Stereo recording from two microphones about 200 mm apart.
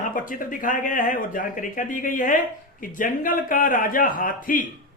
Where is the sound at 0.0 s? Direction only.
40° left (ahead or behind).